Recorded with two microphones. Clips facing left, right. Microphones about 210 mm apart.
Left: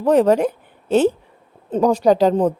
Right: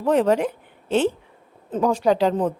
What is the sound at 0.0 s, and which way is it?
A woman's voice, 40° left (ahead or behind).